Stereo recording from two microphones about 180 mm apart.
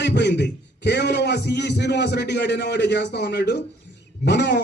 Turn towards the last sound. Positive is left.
turn(degrees=75)  # may be behind; listen again after turning